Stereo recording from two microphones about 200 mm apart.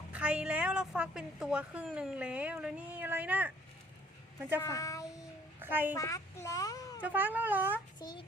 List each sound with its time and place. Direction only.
0.1 s a woman's voice: 5° right (ahead or behind)
4.6 s speech: 15° left (ahead or behind)
5.5 s child singing: 10° right (ahead or behind)
6.0 s child singing: 15° left (ahead or behind)
7.0 s speech: 10° right (ahead or behind)
7.9 s a child's voice: 20° left (ahead or behind)